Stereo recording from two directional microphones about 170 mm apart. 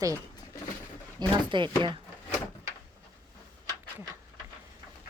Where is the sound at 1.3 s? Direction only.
30° right (ahead or behind).